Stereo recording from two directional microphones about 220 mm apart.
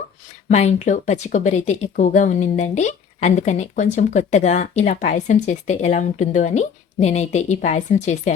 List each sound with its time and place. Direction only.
0.4 s speech: 30° left (ahead or behind)